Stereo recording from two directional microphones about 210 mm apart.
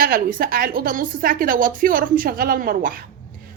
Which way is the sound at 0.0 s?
45° right (ahead or behind).